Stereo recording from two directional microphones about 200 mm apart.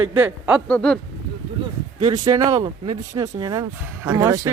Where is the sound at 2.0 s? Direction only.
20° right (ahead or behind).